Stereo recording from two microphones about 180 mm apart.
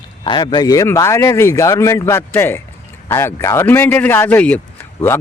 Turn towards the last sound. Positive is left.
turn(degrees=10)  # may be behind; listen again after turning